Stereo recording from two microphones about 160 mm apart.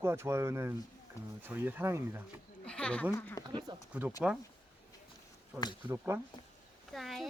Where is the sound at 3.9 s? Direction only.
10° right (ahead or behind).